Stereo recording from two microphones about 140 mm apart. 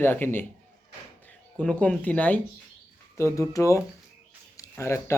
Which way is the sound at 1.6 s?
10° left (ahead or behind).